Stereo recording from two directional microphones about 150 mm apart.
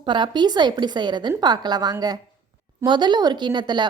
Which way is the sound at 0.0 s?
30° right (ahead or behind).